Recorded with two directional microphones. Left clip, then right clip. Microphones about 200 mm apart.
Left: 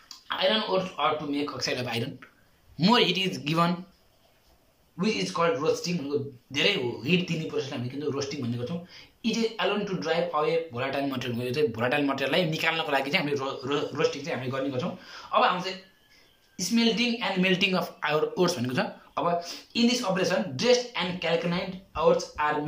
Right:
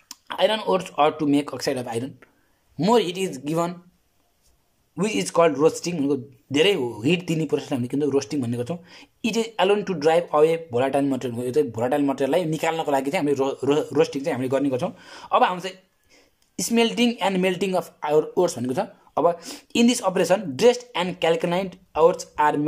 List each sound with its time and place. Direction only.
0.1 s speech: 40° right (ahead or behind)
4.9 s speech: 40° right (ahead or behind)